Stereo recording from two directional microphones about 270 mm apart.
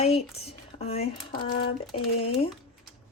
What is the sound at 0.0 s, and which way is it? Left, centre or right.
Speech, left.